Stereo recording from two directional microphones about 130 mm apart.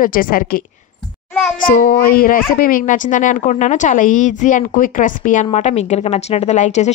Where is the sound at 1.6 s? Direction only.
90° left.